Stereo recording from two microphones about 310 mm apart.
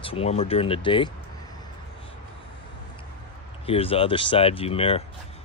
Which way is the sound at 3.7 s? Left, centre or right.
Centre.